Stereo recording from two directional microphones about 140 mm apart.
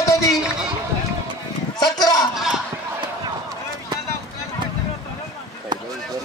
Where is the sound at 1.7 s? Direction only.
30° left (ahead or behind).